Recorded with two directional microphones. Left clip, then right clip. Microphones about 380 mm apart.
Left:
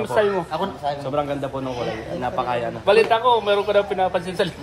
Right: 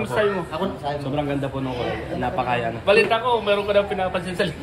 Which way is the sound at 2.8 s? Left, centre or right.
Left.